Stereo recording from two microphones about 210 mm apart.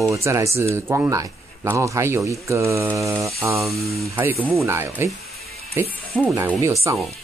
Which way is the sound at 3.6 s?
Centre (ahead or behind).